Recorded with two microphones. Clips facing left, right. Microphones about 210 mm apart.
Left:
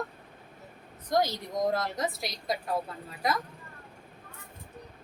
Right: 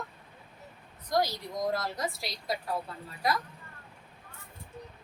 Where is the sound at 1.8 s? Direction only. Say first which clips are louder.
Left 2 dB; 20° left (ahead or behind).